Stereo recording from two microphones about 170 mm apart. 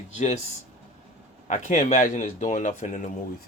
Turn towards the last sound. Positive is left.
turn(degrees=45)  # may be behind; listen again after turning